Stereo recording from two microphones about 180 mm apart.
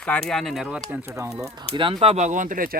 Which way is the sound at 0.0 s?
5° left (ahead or behind).